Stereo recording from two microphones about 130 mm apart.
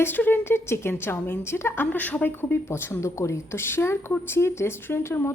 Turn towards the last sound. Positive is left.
turn(degrees=20)  # may be behind; listen again after turning